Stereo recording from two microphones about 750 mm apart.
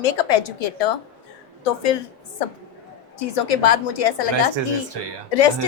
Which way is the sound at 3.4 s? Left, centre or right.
Left.